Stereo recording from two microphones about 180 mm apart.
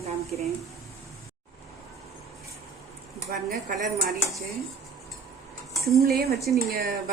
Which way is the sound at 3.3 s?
50° right (ahead or behind).